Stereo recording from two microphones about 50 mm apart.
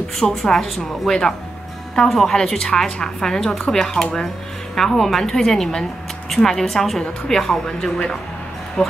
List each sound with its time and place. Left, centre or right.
0.2 s a woman's voice: centre